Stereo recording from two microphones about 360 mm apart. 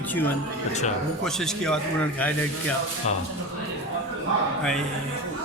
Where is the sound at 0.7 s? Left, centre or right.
Centre.